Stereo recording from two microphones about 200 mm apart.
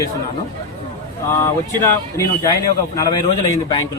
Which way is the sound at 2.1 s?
15° left (ahead or behind).